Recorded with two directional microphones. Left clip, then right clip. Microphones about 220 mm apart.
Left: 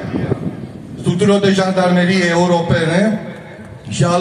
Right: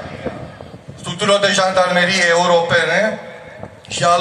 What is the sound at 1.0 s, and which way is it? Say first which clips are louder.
A man's voice: even; 25° right (ahead or behind).